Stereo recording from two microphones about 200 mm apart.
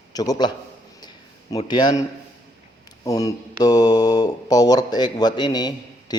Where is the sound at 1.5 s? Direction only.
20° left (ahead or behind).